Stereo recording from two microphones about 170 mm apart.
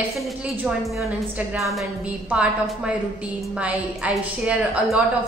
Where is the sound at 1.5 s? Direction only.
Centre (ahead or behind).